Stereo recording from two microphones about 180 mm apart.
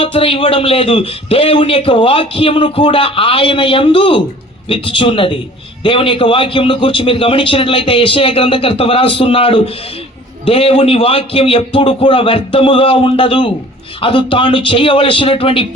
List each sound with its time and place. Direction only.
0.0 s a man's voice: 30° left (ahead or behind)